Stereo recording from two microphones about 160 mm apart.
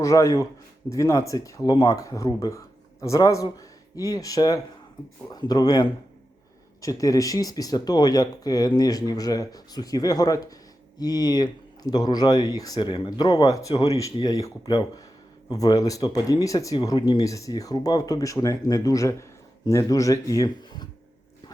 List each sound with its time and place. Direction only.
0.0 s speech: 20° left (ahead or behind)